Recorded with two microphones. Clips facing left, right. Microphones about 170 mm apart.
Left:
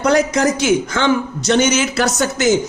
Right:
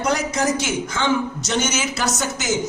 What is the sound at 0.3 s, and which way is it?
A woman's voice, 75° left (ahead or behind).